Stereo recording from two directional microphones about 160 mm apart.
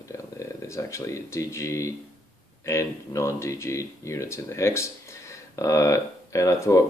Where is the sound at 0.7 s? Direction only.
20° left (ahead or behind).